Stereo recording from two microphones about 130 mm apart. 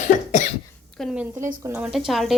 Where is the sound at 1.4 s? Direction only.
20° right (ahead or behind).